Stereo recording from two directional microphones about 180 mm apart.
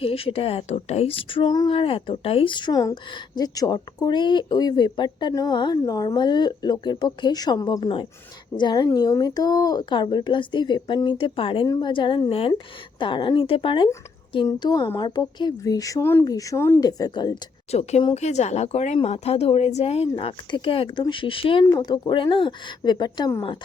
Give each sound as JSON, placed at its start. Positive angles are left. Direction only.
{"t": 0.0, "sound": "speech", "side_deg": 30}
{"t": 17.7, "sound": "speech", "side_deg": 35}